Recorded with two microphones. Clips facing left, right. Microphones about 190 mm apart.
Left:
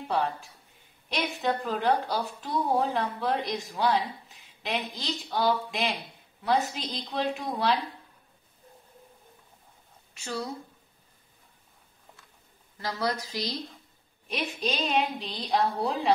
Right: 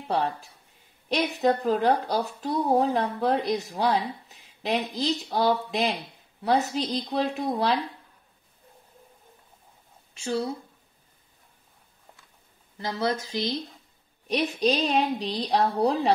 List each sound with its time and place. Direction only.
0.1 s a woman's voice: 35° right (ahead or behind)
10.1 s speech: 25° right (ahead or behind)
12.7 s speech: 25° right (ahead or behind)
14.2 s a woman's voice: 35° right (ahead or behind)